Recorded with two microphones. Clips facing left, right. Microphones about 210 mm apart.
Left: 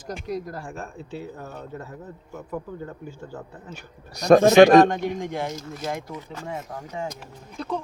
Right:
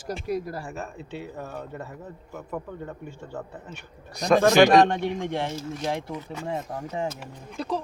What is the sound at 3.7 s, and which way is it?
A man's voice, 40° left (ahead or behind).